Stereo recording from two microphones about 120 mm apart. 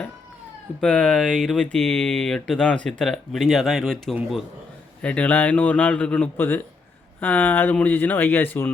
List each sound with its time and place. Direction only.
0.8 s speech: 5° left (ahead or behind)
5.0 s a man's voice: 10° left (ahead or behind)